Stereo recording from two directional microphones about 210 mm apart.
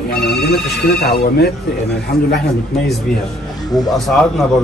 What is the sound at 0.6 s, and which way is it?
Speech, 50° left (ahead or behind).